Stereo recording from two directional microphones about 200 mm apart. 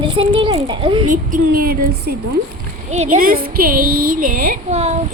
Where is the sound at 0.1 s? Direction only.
25° right (ahead or behind).